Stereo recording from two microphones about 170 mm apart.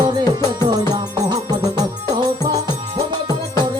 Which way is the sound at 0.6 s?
25° right (ahead or behind).